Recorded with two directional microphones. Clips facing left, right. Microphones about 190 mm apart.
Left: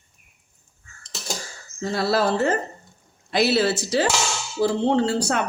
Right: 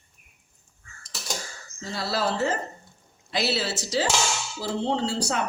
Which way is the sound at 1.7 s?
55° left (ahead or behind).